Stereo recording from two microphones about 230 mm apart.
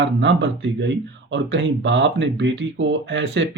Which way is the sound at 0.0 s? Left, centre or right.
Right.